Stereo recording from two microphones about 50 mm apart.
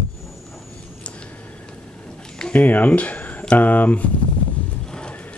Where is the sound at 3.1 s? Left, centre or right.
Left.